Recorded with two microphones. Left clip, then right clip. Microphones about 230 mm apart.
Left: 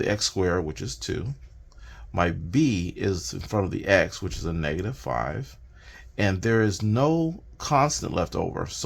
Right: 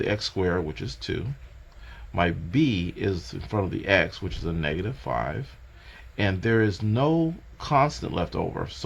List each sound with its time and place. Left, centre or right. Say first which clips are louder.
0.0 s speech: left 1 dB; left